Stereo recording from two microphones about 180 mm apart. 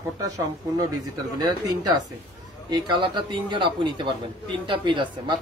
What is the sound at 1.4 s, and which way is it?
Speech, 20° right (ahead or behind).